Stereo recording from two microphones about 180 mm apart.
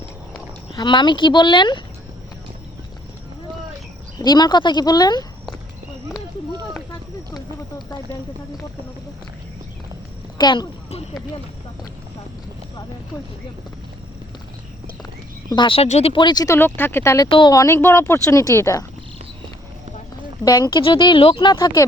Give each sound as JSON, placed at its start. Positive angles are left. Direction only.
{"t": 0.7, "sound": "speech", "side_deg": 25}
{"t": 4.2, "sound": "speech", "side_deg": 25}
{"t": 7.3, "sound": "speech", "side_deg": 20}
{"t": 10.3, "sound": "speech", "side_deg": 25}
{"t": 15.4, "sound": "speech", "side_deg": 25}
{"t": 17.2, "sound": "speech", "side_deg": 30}
{"t": 20.4, "sound": "speech", "side_deg": 20}